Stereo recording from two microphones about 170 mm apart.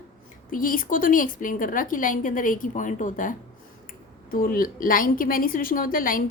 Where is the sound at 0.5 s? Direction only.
55° left (ahead or behind).